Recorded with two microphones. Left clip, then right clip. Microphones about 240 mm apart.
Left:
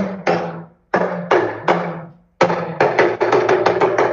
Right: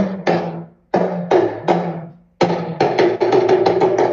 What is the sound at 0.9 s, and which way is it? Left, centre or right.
Music, centre.